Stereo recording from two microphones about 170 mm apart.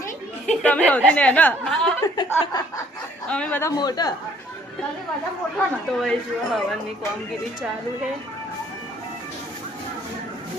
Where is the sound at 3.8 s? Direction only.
25° left (ahead or behind).